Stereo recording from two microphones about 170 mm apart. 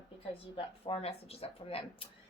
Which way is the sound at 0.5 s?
35° left (ahead or behind).